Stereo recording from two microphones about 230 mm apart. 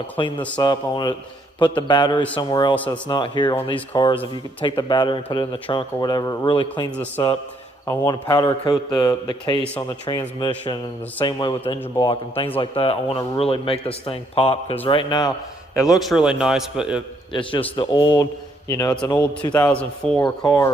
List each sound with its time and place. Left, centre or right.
0.2 s speech: left
2.7 s a man's voice: centre
3.1 s a man's voice: centre
15.7 s a man's voice: centre
17.3 s a man's voice: left; by 20.1 s centre
20.1 s a man's voice: centre